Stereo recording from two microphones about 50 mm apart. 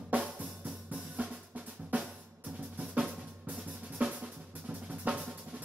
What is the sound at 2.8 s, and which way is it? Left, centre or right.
Drum, right.